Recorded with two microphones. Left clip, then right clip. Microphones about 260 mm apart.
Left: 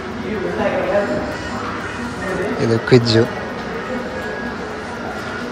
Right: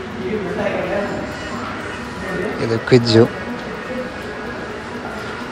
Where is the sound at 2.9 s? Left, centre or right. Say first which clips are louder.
Right 2 dB; centre.